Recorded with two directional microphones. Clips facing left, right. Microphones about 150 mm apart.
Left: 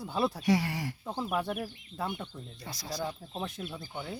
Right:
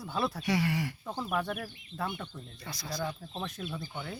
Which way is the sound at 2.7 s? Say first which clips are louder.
Even; 40° left (ahead or behind).